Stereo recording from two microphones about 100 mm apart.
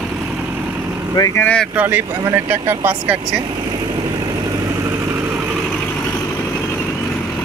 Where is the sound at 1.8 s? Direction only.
20° right (ahead or behind).